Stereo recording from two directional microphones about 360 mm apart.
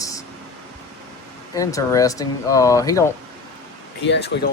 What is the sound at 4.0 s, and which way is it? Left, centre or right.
Speech, left.